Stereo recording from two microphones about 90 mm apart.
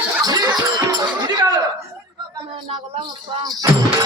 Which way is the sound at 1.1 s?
55° right (ahead or behind).